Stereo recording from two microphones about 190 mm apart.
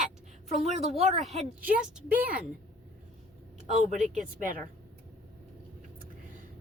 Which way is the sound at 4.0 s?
45° right (ahead or behind).